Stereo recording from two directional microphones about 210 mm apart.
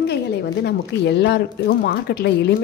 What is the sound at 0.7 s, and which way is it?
Speech, 55° left (ahead or behind).